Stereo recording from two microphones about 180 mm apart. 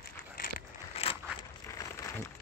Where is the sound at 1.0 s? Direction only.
35° left (ahead or behind).